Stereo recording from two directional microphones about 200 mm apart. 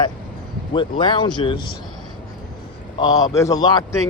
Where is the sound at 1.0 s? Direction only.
25° left (ahead or behind).